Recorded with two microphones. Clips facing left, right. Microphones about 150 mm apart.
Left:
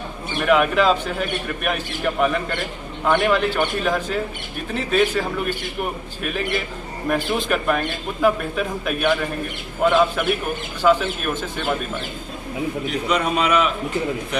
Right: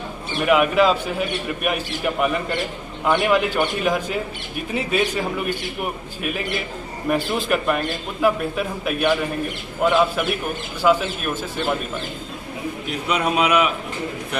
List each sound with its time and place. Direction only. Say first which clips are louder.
0.5 s a man's voice: even; 5° right (ahead or behind)
7.1 s a man's voice: even; 5° right (ahead or behind)
13.1 s a man's voice: right 1 dB; 10° right (ahead or behind)